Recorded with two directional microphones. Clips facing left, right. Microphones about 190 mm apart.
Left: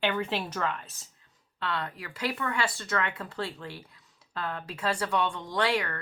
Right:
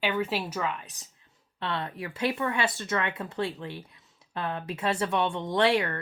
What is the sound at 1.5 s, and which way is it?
Speech, 25° right (ahead or behind).